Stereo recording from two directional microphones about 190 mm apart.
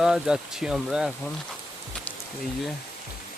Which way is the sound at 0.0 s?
5° right (ahead or behind).